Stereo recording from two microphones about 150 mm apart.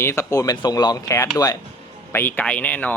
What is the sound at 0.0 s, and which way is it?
A man's voice, 20° left (ahead or behind).